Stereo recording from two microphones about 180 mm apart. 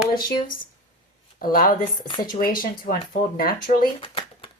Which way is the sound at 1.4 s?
50° left (ahead or behind).